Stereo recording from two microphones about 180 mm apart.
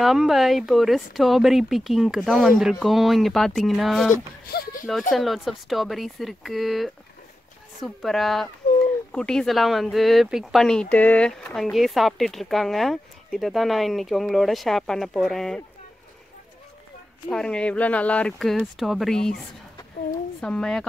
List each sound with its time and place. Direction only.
0.0 s speech: centre (ahead or behind)
4.5 s a sound: 60° left (ahead or behind)
5.1 s speech: centre (ahead or behind)
17.3 s speech: 5° left (ahead or behind)
20.3 s speech: 5° left (ahead or behind)